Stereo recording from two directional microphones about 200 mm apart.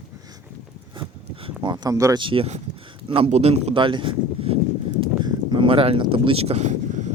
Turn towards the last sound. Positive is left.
turn(degrees=-35)  # may be behind; listen again after turning